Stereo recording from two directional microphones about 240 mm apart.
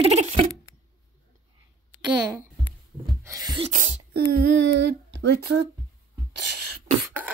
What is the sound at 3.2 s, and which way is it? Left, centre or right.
Gasp, centre.